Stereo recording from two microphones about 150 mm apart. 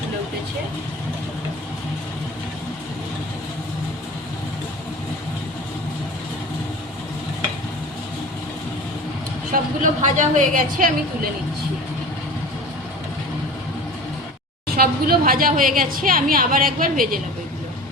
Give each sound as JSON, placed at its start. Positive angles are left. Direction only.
{"t": 9.5, "sound": "a woman's voice", "side_deg": -55}
{"t": 14.8, "sound": "a woman's voice", "side_deg": -85}